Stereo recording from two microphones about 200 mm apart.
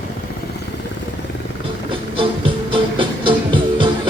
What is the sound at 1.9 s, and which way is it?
Music, 25° right (ahead or behind).